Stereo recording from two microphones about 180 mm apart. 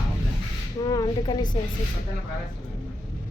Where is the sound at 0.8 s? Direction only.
25° left (ahead or behind).